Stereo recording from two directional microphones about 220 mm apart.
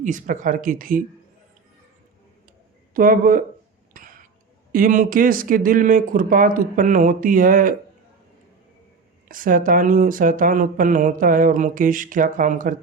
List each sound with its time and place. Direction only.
0.0 s speech: 35° right (ahead or behind)
2.9 s speech: 40° right (ahead or behind)
3.9 s cough: 35° right (ahead or behind)
4.7 s speech: 40° right (ahead or behind)
9.3 s speech: 40° right (ahead or behind)